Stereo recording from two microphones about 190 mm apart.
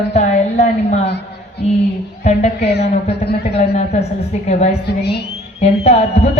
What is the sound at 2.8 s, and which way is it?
Speech, 35° left (ahead or behind).